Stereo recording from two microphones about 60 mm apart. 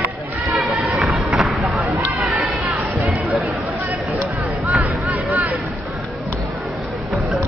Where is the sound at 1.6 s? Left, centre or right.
Centre.